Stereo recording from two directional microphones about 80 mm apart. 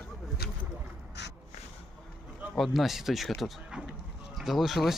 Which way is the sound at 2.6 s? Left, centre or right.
Centre.